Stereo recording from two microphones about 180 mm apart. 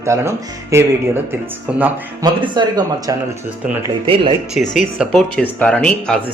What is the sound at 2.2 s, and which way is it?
Speech, 25° right (ahead or behind).